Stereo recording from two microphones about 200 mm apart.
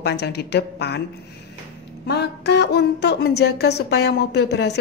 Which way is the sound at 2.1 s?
55° left (ahead or behind).